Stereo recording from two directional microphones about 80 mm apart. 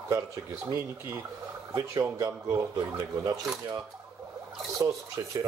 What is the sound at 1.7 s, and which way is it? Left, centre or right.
Speech, right.